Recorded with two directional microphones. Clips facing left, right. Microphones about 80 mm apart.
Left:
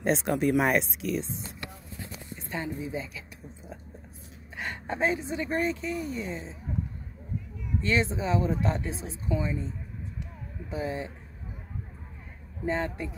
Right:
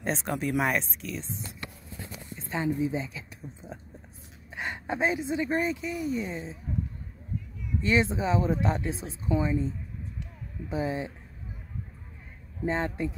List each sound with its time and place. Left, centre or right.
0.0 s speech: centre
2.5 s a woman's voice: right
7.8 s a woman's voice: right
8.8 s speech: left
9.3 s a woman's voice: right
10.7 s a woman's voice: right
12.6 s a woman's voice: right